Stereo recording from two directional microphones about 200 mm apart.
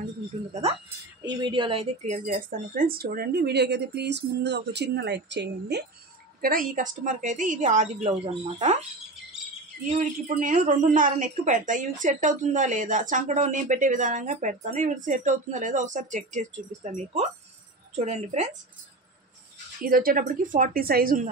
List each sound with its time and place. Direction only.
0.5 s a woman's voice: 35° right (ahead or behind); by 5.9 s 55° right (ahead or behind)
6.4 s a woman's voice: 45° right (ahead or behind)
9.8 s a woman's voice: 40° right (ahead or behind)
19.8 s speech: 45° right (ahead or behind)